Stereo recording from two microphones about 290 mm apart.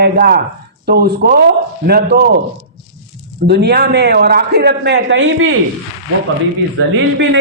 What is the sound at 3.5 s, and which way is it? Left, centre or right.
A man's voice, right.